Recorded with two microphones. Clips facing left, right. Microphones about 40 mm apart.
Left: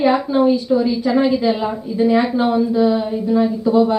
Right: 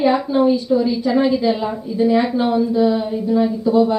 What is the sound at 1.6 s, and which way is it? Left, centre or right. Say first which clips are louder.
Speech: left 1 dB; left.